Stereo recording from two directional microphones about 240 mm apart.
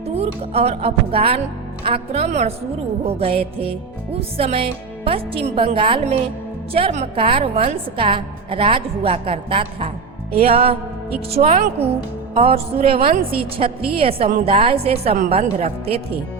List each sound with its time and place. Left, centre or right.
0.2 s a woman's voice: right
13.0 s a woman's voice: right
13.4 s a woman's voice: right